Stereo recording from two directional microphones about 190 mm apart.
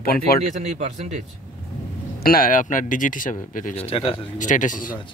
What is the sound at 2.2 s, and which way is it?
Speech, 50° left (ahead or behind).